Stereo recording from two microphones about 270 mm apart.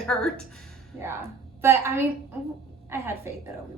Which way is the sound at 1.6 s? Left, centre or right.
Centre.